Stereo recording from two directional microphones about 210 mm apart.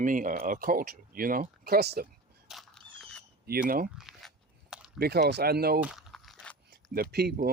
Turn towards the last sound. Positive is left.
turn(degrees=-50)  # may be behind; listen again after turning